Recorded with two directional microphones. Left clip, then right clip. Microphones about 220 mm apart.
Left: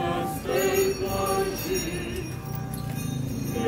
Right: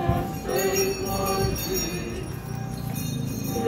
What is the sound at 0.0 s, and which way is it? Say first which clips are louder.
Music: even; 50° left (ahead or behind).